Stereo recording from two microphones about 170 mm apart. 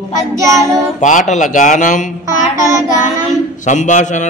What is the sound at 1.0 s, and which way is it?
Speech, 45° left (ahead or behind).